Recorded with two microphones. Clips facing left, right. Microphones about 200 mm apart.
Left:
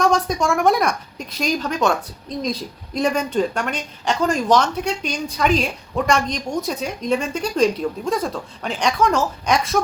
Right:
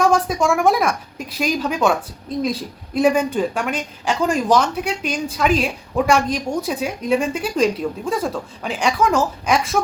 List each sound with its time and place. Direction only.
0.0 s a woman's voice: 5° right (ahead or behind)